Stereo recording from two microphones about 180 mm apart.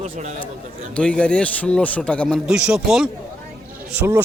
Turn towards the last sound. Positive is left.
turn(degrees=-10)  # may be behind; listen again after turning